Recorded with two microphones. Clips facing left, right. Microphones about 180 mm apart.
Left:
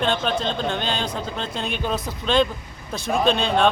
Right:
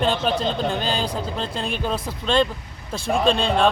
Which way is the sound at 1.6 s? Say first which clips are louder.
Left 1 dB; centre (ahead or behind).